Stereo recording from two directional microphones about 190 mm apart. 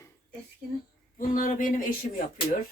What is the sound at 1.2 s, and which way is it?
Speech, 45° left (ahead or behind).